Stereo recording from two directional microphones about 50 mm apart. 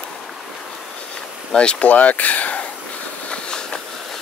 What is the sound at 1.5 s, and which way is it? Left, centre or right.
Speech, left.